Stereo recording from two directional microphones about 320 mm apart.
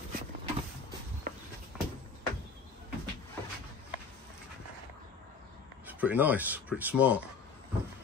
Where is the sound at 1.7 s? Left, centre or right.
Centre.